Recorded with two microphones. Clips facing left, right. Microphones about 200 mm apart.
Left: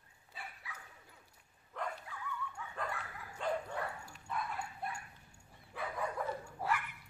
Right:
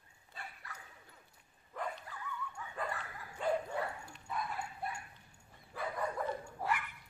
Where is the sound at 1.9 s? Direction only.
Centre (ahead or behind).